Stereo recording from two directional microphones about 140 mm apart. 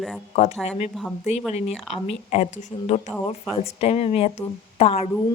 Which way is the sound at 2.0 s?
55° left (ahead or behind).